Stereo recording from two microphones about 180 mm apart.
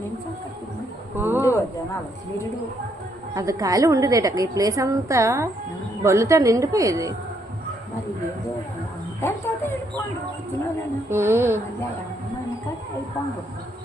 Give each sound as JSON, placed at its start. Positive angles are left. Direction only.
{"t": 1.1, "sound": "a sound", "side_deg": -10}
{"t": 3.3, "sound": "a woman's voice", "side_deg": -20}
{"t": 11.1, "sound": "a woman's voice", "side_deg": -15}